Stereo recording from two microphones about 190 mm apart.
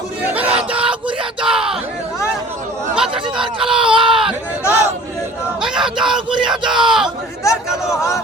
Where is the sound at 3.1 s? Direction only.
25° right (ahead or behind).